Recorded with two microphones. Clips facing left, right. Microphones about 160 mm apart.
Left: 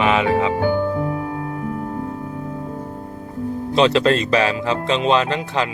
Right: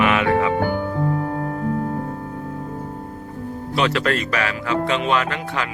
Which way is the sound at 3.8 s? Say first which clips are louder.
Left 5 dB; 25° left (ahead or behind).